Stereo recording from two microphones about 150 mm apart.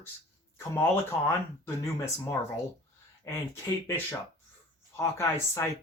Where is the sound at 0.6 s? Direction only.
20° left (ahead or behind).